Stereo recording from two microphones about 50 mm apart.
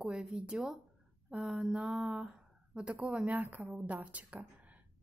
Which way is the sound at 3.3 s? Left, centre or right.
Right.